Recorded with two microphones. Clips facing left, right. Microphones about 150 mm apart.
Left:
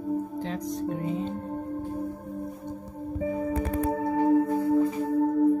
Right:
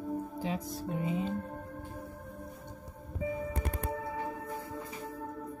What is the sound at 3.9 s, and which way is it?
Singing bowl, 40° left (ahead or behind).